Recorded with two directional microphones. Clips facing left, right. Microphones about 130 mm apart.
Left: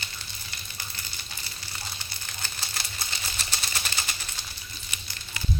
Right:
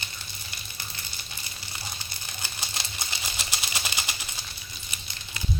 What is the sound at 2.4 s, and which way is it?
Typewriter, 15° right (ahead or behind).